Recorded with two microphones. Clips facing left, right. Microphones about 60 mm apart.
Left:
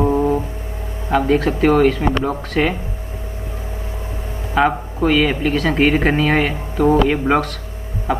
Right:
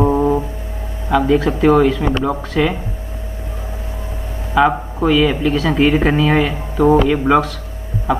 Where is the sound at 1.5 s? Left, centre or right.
Left.